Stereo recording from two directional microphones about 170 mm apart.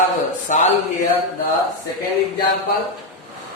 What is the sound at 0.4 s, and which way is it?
Speech, 45° left (ahead or behind).